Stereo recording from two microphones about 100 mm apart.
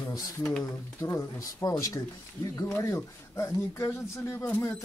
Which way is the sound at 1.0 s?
25° left (ahead or behind).